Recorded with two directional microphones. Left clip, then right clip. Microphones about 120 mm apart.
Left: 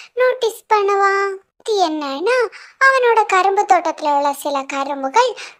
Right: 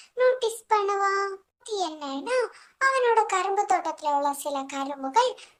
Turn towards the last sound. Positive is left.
turn(degrees=45)  # may be behind; listen again after turning